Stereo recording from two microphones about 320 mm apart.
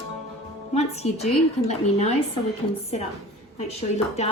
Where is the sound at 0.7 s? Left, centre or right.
Centre.